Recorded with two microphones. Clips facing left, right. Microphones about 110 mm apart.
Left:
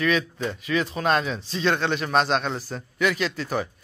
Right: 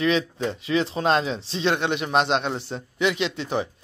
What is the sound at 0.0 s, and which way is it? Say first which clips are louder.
Speech: right 1 dB; 25° right (ahead or behind).